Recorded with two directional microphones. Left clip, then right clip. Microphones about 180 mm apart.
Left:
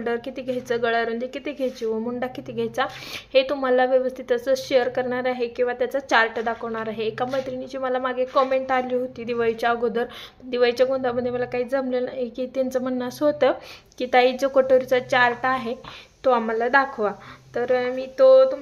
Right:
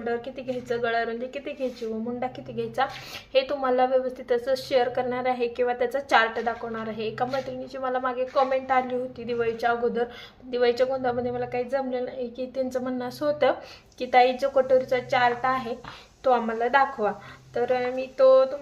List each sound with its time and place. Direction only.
0.0 s a woman's voice: 35° left (ahead or behind)